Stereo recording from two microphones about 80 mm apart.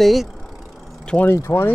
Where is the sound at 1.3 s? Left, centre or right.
Left.